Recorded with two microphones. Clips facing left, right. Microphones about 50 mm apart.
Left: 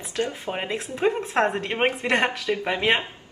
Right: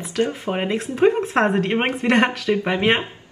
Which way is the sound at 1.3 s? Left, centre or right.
Right.